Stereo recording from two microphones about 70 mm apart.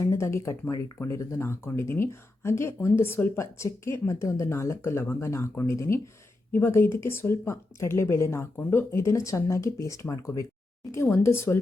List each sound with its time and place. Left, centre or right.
0.0 s speech: left
3.3 s speech: left
10.9 s speech: left